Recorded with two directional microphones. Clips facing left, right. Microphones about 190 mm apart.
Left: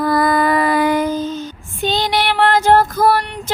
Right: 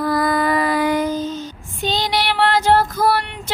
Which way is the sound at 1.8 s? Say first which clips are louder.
Left 3 dB; 55° left (ahead or behind).